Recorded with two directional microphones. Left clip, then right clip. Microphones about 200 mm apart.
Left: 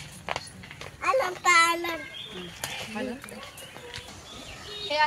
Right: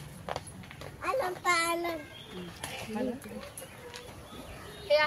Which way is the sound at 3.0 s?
25° left (ahead or behind).